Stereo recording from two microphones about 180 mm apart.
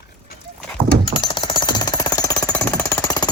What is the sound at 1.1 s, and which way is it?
Jackhammer, 25° left (ahead or behind).